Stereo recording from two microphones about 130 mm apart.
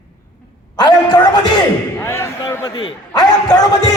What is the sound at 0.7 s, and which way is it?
Speech, 30° left (ahead or behind).